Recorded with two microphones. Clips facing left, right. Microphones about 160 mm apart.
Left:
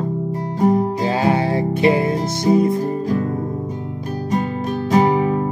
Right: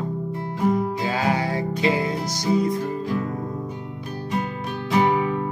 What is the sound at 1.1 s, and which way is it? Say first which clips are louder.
Music: left 6 dB; 25° left (ahead or behind).